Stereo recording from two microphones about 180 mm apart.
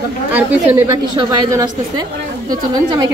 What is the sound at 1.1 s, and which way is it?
A woman's voice, 25° right (ahead or behind).